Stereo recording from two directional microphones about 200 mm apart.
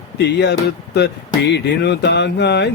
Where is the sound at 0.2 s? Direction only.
60° left (ahead or behind).